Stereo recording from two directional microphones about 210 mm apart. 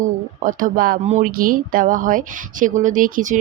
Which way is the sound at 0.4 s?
40° right (ahead or behind).